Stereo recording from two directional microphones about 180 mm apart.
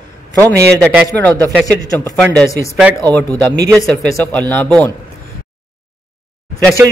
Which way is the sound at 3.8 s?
5° left (ahead or behind).